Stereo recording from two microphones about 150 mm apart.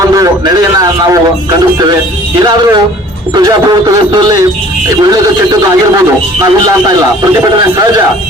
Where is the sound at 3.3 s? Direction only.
25° right (ahead or behind).